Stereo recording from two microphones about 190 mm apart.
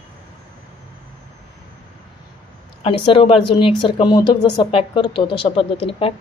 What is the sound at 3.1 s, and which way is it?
Speech, 25° left (ahead or behind).